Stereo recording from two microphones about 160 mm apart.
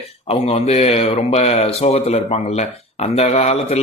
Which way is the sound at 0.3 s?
40° left (ahead or behind).